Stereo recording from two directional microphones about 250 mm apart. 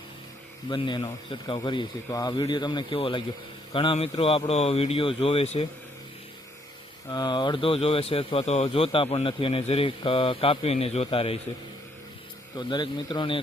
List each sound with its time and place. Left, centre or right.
0.7 s speech: centre
7.1 s speech: centre
12.5 s speech: centre